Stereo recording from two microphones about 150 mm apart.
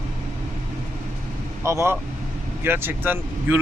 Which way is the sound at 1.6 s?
20° right (ahead or behind).